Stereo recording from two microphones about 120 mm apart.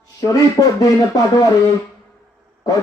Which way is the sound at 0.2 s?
30° left (ahead or behind).